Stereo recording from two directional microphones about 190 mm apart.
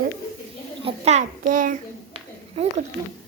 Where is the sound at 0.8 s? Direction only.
35° right (ahead or behind).